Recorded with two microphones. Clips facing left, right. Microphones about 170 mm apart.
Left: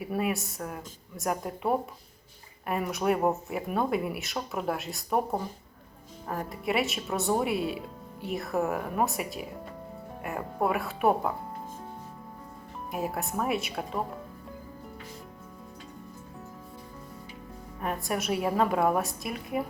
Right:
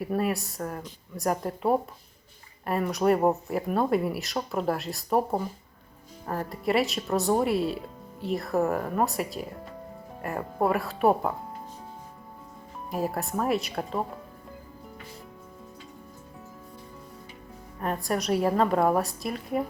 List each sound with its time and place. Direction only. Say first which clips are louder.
0.0 s speech: right 2 dB; centre (ahead or behind)
12.9 s speech: right 3 dB; centre (ahead or behind)
17.7 s speech: right 3 dB; 5° left (ahead or behind)